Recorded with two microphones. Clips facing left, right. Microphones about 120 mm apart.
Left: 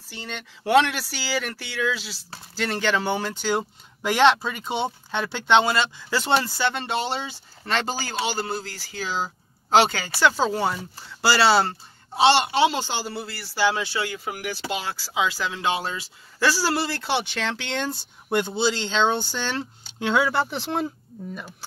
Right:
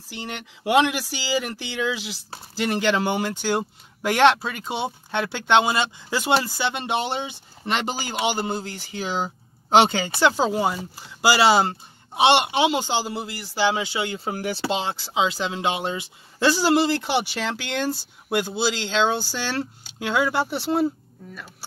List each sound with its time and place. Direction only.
0.1 s speech: 15° right (ahead or behind)